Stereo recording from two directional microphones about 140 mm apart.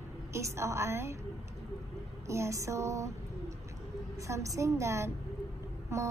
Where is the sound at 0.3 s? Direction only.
20° right (ahead or behind).